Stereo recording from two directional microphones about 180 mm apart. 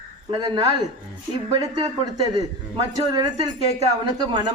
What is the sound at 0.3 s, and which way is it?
Speech, 25° right (ahead or behind).